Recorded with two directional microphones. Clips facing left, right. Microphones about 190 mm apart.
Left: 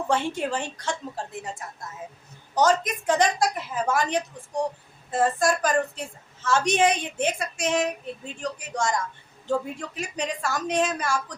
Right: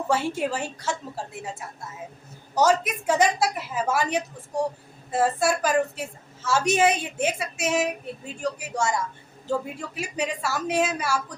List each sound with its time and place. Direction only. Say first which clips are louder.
0.1 s a woman's voice: right 1 dB; 5° right (ahead or behind)